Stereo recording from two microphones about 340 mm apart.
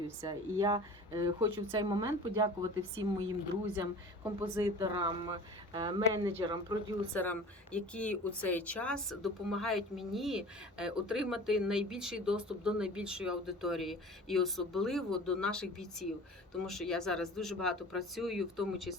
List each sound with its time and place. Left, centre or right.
0.2 s speech: centre
4.4 s speech: centre
7.1 s speech: centre